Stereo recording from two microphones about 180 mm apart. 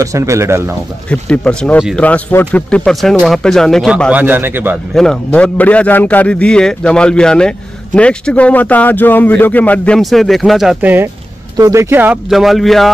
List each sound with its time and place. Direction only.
0.0 s speech: 15° right (ahead or behind)
1.1 s speech: 5° left (ahead or behind); by 4.7 s 10° right (ahead or behind)
4.9 s a man's voice: 5° left (ahead or behind)